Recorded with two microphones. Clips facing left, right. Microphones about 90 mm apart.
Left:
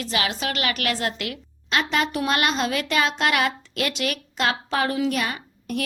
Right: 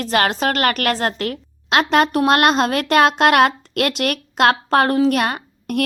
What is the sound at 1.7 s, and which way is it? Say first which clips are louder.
A woman's voice: right 8 dB; 55° right (ahead or behind).